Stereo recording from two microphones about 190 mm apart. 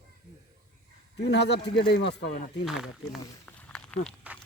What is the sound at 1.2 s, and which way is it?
Speech, 65° left (ahead or behind).